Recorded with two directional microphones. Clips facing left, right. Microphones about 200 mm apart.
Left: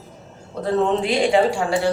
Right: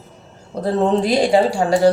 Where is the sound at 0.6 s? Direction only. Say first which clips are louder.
Right 3 dB; 40° right (ahead or behind).